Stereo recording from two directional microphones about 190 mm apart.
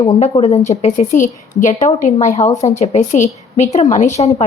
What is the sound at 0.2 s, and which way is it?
A woman's voice, 35° left (ahead or behind).